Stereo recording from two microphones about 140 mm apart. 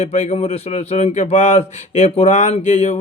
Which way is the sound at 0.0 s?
55° left (ahead or behind).